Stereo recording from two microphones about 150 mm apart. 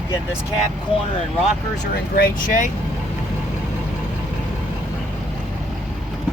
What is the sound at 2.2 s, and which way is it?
Speech, 60° left (ahead or behind).